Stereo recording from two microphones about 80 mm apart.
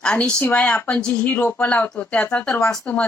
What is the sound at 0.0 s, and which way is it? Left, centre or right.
Speech, centre.